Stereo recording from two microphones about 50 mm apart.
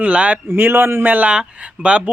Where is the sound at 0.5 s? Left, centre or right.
Right.